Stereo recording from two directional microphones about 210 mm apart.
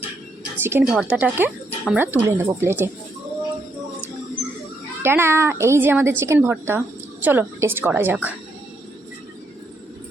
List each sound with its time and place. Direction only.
0.6 s a woman's voice: 10° right (ahead or behind)
5.0 s a woman's voice: 10° right (ahead or behind)